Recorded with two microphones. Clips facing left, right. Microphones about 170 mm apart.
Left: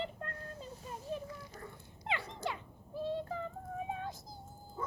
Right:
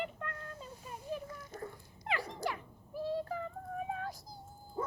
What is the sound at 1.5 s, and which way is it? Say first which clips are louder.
Dog: right 5 dB; 50° right (ahead or behind).